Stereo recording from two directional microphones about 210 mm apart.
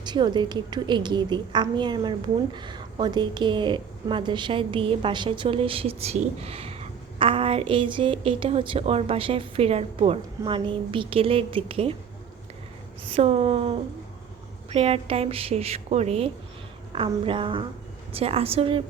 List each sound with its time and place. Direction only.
0.0 s a woman's voice: 20° right (ahead or behind)
13.1 s a woman's voice: 30° right (ahead or behind)